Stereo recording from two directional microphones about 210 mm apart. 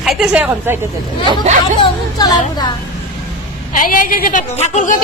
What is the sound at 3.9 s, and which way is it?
A woman's voice, 40° left (ahead or behind).